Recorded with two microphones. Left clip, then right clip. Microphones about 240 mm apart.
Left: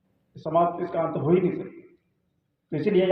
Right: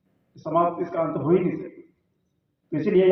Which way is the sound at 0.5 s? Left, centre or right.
Left.